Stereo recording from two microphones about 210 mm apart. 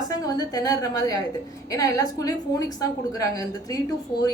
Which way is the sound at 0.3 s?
20° left (ahead or behind).